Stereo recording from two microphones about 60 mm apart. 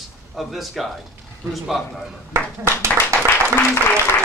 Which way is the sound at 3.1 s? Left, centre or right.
Right.